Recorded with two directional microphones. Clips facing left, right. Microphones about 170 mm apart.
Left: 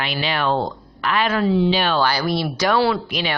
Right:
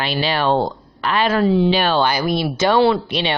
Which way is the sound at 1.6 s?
55° right (ahead or behind).